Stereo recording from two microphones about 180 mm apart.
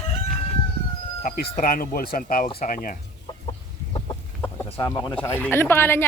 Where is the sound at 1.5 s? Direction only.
50° left (ahead or behind).